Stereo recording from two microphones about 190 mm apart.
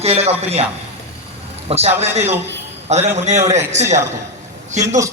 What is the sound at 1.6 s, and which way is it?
A man's voice, 35° right (ahead or behind).